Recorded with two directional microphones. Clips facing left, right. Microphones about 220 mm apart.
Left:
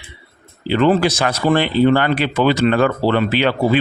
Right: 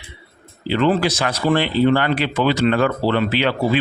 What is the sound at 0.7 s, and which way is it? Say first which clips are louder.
Speech: left 3 dB; 50° left (ahead or behind).